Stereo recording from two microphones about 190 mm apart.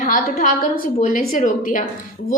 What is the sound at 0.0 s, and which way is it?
A woman's voice, 45° left (ahead or behind).